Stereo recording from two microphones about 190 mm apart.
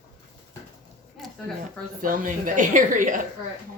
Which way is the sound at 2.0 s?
45° right (ahead or behind).